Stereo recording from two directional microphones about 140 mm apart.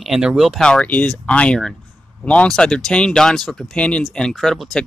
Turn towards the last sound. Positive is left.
turn(degrees=0)  # may be behind; listen again after turning